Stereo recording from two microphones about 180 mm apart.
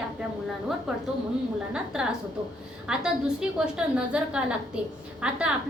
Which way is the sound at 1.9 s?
5° right (ahead or behind).